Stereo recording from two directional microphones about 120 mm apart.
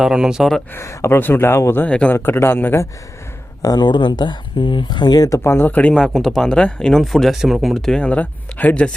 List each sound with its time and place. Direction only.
0.0 s speech: 5° right (ahead or behind)
0.7 s speech: 20° left (ahead or behind)
3.6 s speech: 35° left (ahead or behind); by 9.0 s 10° left (ahead or behind)